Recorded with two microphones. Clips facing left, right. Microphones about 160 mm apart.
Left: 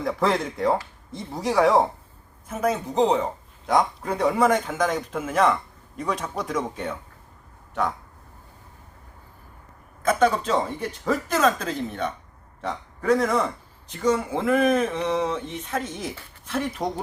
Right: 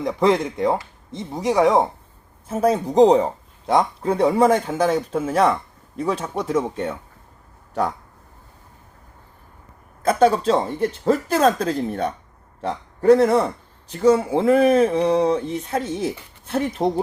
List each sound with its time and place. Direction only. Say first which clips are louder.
0.0 s speech: right 5 dB; 20° right (ahead or behind)
2.5 s a man's voice: right 5 dB; 30° right (ahead or behind)
3.7 s a man's voice: right 3 dB; 25° right (ahead or behind)
10.0 s a man's voice: right 4 dB; 30° right (ahead or behind)